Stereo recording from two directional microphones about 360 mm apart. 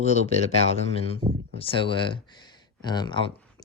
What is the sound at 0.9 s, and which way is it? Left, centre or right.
Speech, centre.